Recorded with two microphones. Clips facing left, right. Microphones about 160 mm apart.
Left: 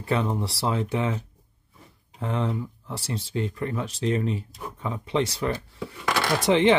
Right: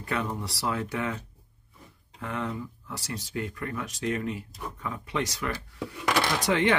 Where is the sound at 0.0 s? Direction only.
30° left (ahead or behind).